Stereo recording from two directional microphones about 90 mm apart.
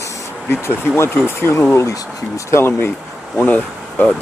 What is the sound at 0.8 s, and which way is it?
Speech, 25° left (ahead or behind).